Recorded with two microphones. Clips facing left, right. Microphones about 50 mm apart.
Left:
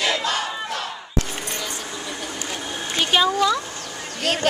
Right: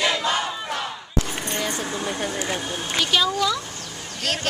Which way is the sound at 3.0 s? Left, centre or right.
Left.